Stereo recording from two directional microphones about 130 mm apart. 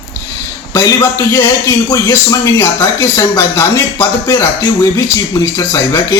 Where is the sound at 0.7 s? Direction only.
25° left (ahead or behind).